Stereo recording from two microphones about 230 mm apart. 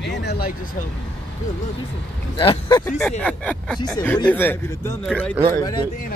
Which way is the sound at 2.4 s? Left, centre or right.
Left.